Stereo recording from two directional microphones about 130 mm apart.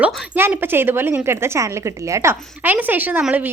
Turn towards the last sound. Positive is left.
turn(degrees=-10)  # may be behind; listen again after turning